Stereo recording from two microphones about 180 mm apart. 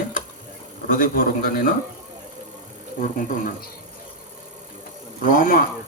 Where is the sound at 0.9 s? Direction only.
50° left (ahead or behind).